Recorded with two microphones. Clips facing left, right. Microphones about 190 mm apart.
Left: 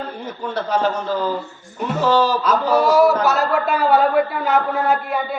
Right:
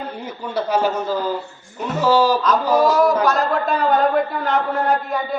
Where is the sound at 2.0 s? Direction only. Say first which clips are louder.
Right 1 dB; 10° right (ahead or behind).